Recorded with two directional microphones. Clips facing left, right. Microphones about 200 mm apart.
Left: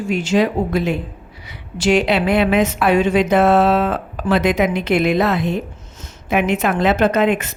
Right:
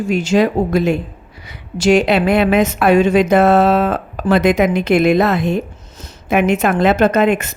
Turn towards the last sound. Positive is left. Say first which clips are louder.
# right 2 dB
turn(degrees=-45)  # may be behind; listen again after turning